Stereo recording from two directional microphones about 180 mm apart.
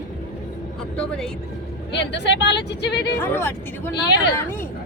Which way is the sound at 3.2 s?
15° left (ahead or behind).